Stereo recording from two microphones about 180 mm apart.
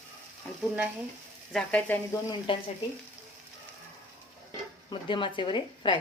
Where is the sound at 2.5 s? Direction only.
25° left (ahead or behind).